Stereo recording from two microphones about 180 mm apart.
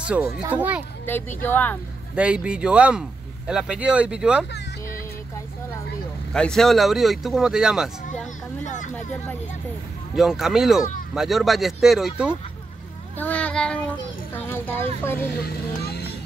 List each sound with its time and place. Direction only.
0.1 s a child's voice: 10° right (ahead or behind)
1.0 s speech: 10° left (ahead or behind)
2.1 s speech: 5° right (ahead or behind)
6.3 s speech: 5° left (ahead or behind)
8.6 s speech: 45° left (ahead or behind)
10.1 s speech: centre (ahead or behind)
13.2 s child singing: 10° left (ahead or behind)
14.3 s speech: 10° left (ahead or behind)
15.4 s speech: 60° left (ahead or behind)